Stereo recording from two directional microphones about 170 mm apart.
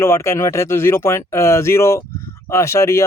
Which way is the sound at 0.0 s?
15° left (ahead or behind).